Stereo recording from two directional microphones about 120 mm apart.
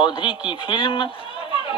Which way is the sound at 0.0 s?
40° left (ahead or behind).